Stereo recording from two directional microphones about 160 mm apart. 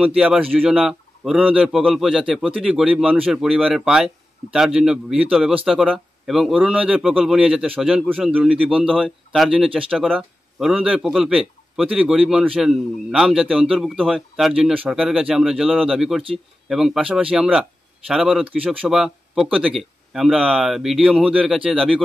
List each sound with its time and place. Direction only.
0.0 s a man's voice: 5° right (ahead or behind)